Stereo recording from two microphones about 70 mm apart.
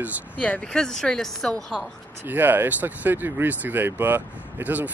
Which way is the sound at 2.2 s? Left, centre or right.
Right.